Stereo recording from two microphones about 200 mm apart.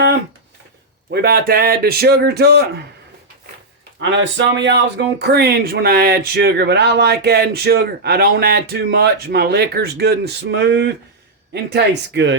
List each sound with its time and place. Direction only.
1.1 s speech: 50° right (ahead or behind)
4.1 s speech: 65° right (ahead or behind)